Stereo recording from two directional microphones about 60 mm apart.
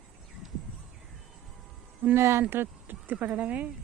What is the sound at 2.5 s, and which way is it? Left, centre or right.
Speech, right.